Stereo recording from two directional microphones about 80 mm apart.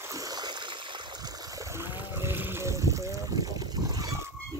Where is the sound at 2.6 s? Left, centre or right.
Right.